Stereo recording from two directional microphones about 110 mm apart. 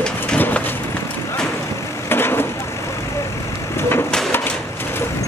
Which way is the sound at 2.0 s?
20° left (ahead or behind).